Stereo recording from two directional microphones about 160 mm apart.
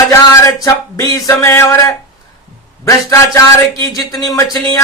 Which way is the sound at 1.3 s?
15° left (ahead or behind).